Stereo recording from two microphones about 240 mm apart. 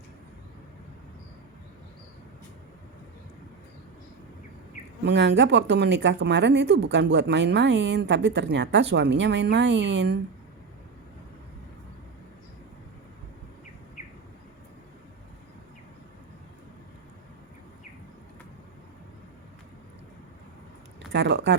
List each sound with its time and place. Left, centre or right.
5.0 s speech: right
21.1 s speech: right